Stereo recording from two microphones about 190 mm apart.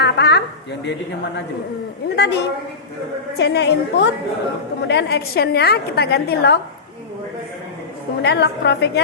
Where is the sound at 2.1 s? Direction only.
60° left (ahead or behind).